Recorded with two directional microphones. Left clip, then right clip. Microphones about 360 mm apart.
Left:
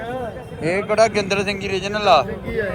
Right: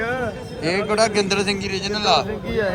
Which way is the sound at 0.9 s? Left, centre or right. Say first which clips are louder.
Left 3 dB; centre.